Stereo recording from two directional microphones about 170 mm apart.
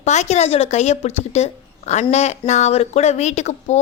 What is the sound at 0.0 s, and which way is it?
Speech, 40° left (ahead or behind).